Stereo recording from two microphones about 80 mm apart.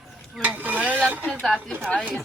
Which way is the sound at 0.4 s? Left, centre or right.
Right.